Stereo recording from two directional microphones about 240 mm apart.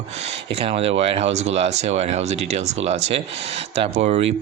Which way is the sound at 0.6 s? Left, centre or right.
Right.